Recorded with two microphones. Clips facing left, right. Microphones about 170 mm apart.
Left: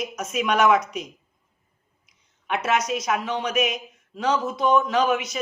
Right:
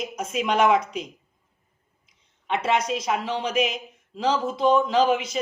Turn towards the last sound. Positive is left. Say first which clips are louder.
# right 1 dB
turn(degrees=-30)  # may be behind; listen again after turning